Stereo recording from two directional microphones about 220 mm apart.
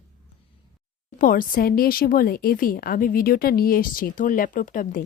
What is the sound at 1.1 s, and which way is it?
A woman's voice, 40° left (ahead or behind).